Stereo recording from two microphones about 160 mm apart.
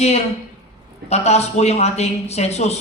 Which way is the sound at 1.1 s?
40° left (ahead or behind).